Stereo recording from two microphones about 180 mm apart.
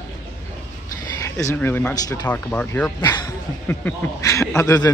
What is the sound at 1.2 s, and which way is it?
Speech, 15° left (ahead or behind).